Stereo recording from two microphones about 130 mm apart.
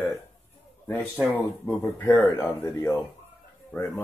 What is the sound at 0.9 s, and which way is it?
Speech, 5° right (ahead or behind).